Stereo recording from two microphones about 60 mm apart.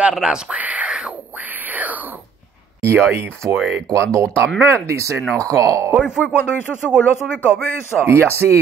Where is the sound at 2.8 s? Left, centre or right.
Right.